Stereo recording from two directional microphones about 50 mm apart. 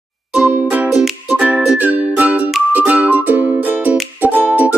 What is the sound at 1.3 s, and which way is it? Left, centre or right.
Music, right.